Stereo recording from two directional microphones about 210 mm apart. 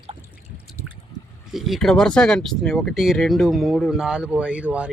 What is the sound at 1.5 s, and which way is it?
Speech, centre (ahead or behind).